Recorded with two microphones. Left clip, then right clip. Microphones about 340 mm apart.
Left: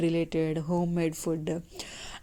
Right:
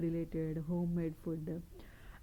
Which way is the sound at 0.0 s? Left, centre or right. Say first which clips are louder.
Left 11 dB; centre.